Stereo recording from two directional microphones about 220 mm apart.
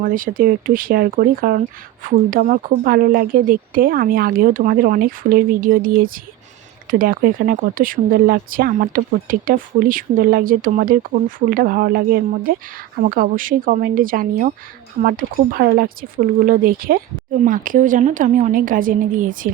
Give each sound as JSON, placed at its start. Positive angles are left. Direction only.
{"t": 0.0, "sound": "speech", "side_deg": -40}